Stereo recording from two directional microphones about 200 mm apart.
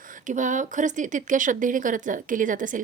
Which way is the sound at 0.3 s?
40° right (ahead or behind).